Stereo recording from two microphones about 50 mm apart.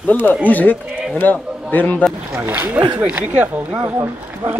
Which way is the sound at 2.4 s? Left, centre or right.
Right.